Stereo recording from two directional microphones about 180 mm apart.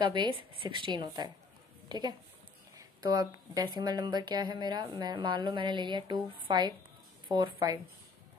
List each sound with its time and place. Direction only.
0.0 s a woman's voice: 25° right (ahead or behind)